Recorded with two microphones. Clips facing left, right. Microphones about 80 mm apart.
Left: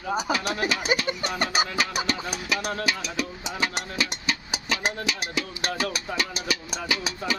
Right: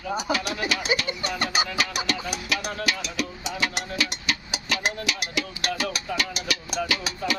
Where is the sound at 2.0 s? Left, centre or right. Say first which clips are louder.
Even; left.